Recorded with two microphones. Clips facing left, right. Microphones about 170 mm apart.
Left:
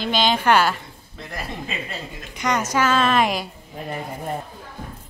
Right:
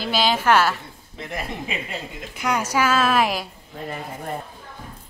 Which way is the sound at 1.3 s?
15° right (ahead or behind).